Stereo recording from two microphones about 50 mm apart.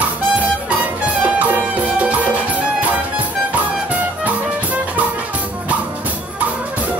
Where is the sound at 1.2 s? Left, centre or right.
Right.